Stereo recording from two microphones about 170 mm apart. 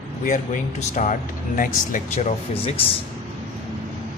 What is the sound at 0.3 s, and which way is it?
Speech, 50° left (ahead or behind).